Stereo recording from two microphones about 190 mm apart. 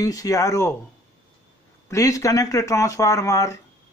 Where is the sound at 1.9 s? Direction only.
15° left (ahead or behind).